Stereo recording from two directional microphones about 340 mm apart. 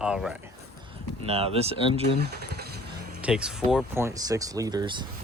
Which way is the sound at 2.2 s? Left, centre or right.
Right.